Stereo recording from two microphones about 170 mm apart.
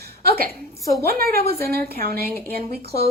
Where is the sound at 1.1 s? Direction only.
65° right (ahead or behind).